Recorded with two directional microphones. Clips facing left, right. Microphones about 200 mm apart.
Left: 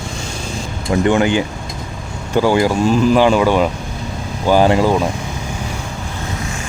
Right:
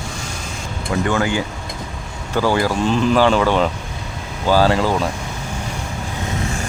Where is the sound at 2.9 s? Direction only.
5° left (ahead or behind).